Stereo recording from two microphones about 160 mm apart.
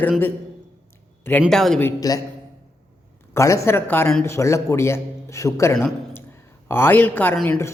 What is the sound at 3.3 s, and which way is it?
Speech, 20° left (ahead or behind).